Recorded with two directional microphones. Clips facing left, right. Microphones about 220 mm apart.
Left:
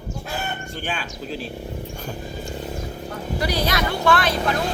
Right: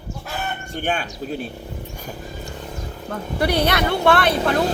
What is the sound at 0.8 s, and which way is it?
Speech, 45° right (ahead or behind).